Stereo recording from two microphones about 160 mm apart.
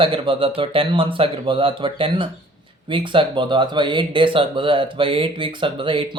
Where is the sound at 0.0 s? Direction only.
35° right (ahead or behind).